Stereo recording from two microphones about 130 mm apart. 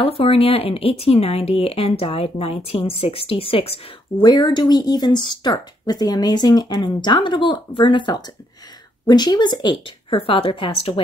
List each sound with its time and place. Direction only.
0.0 s speech: 50° left (ahead or behind)
4.2 s speech: 35° left (ahead or behind)